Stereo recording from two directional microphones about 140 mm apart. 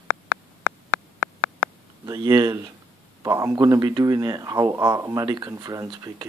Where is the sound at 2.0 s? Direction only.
25° right (ahead or behind).